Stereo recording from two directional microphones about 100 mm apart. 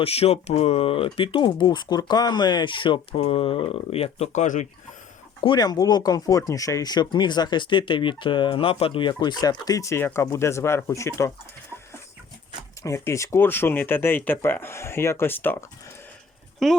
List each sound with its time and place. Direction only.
0.0 s speech: 90° left
5.4 s speech: 45° left (ahead or behind); by 11.3 s 30° left (ahead or behind)
12.8 s speech: 30° left (ahead or behind)
16.6 s speech: 5° left (ahead or behind)